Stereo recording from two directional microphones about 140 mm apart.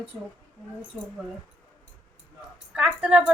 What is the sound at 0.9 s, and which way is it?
Speech, 10° right (ahead or behind).